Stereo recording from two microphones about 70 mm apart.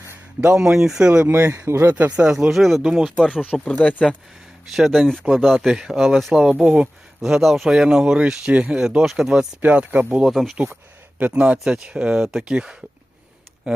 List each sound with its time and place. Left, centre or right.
0.5 s speech: centre
1.5 s speech: right
1.9 s speech: right
2.3 s speech: centre
3.3 s speech: centre
3.6 s speech: centre
4.6 s speech: centre
6.5 s speech: centre
7.2 s speech: centre
9.6 s speech: right
10.2 s speech: centre
11.2 s speech: centre